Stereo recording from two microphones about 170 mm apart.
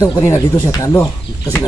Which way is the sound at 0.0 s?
20° left (ahead or behind).